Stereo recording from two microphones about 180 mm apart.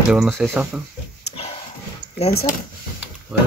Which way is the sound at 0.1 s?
5° right (ahead or behind).